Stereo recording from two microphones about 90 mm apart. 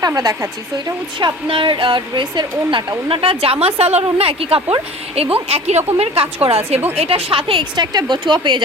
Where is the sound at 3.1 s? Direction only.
90° right.